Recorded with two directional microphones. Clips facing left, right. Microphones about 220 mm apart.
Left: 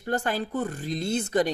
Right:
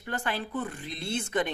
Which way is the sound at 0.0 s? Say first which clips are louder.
Left 6 dB; 45° left (ahead or behind).